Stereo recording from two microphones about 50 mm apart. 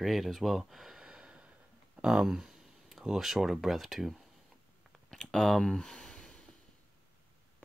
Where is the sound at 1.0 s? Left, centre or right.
Centre.